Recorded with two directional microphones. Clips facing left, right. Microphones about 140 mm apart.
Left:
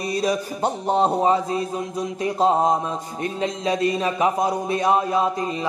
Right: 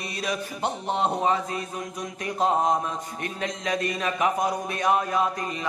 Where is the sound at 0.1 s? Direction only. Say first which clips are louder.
Left 8 dB; 35° left (ahead or behind).